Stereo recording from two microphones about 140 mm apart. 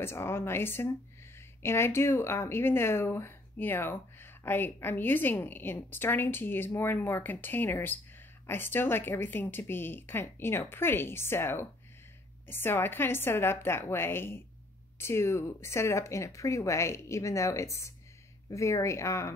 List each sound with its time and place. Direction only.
0.0 s speech: 15° left (ahead or behind)